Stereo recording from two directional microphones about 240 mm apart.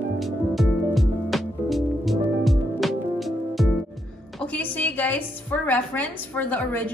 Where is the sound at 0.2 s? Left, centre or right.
Centre.